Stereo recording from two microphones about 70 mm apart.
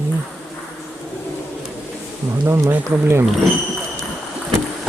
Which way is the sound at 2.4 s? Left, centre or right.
Right.